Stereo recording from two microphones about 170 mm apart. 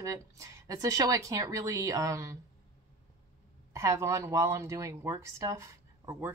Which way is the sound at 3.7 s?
15° right (ahead or behind).